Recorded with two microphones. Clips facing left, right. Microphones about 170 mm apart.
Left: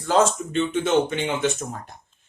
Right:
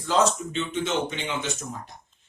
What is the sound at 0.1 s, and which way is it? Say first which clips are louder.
Speech: left 3 dB; 50° left (ahead or behind).